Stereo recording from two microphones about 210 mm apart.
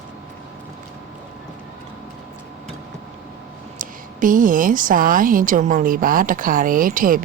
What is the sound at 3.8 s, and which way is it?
A woman's voice, 40° right (ahead or behind).